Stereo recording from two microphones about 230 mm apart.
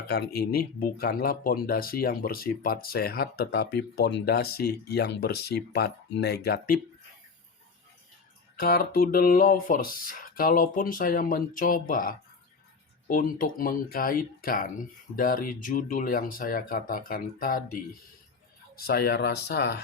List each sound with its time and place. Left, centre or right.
0.1 s speech: left
8.5 s speech: left
18.8 s speech: left